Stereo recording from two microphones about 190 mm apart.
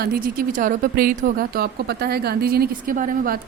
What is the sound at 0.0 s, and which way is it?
Speech, 50° right (ahead or behind).